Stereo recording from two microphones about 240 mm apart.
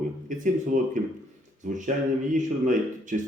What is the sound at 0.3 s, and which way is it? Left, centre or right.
Speech, right.